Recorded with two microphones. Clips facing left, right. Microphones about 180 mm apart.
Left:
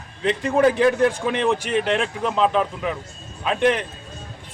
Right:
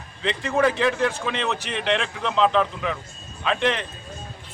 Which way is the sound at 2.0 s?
10° left (ahead or behind).